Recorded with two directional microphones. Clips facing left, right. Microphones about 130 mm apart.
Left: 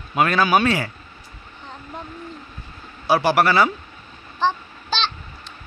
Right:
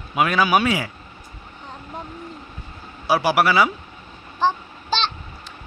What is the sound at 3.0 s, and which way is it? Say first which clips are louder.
A man's voice: left 1 dB; 10° right (ahead or behind).